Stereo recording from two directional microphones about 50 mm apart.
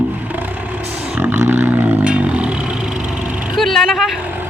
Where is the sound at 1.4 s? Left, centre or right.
Right.